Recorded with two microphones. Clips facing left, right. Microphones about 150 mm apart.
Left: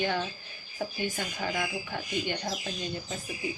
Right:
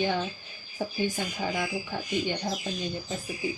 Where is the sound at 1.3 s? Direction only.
15° right (ahead or behind).